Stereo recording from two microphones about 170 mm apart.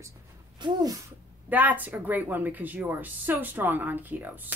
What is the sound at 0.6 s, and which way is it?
Speech, 25° right (ahead or behind).